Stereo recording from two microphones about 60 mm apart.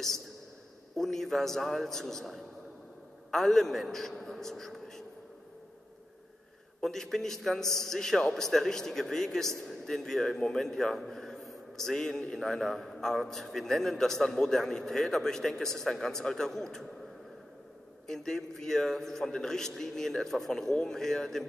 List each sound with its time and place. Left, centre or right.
0.9 s a man's voice: centre
6.8 s a man's voice: centre
18.0 s a man's voice: centre